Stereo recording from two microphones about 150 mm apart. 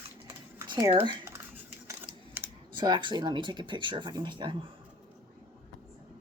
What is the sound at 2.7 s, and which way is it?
Speech, 30° right (ahead or behind).